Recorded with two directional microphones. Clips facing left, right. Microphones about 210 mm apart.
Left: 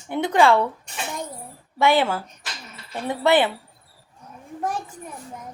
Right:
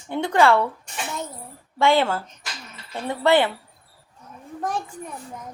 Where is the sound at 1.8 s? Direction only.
15° left (ahead or behind).